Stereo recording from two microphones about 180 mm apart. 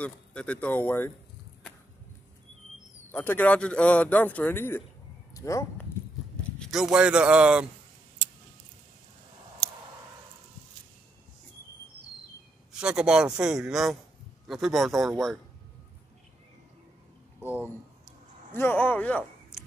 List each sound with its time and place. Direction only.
0.0 s a man's voice: 5° left (ahead or behind)
3.1 s a man's voice: 10° left (ahead or behind)
6.6 s speech: centre (ahead or behind)
12.7 s speech: 5° right (ahead or behind)
18.5 s a man's voice: 10° left (ahead or behind)
19.5 s a sound: 5° right (ahead or behind)